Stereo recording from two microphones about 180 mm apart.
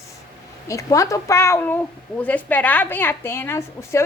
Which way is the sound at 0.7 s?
20° left (ahead or behind).